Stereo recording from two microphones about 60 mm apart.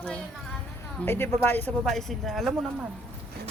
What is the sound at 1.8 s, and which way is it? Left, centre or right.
Speech, centre.